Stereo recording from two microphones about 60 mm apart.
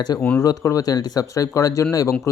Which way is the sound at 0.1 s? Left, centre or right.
Left.